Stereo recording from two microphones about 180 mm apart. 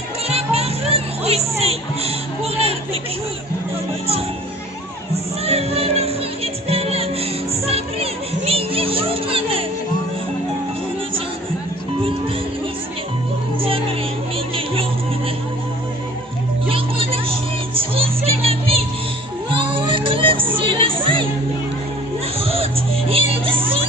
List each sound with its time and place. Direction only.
0.3 s music: 35° right (ahead or behind)
5.1 s music: 35° right (ahead or behind)
13.6 s music: 30° right (ahead or behind)
16.6 s vehicle: 30° right (ahead or behind)
17.7 s music: 30° right (ahead or behind)
22.4 s music: 30° right (ahead or behind)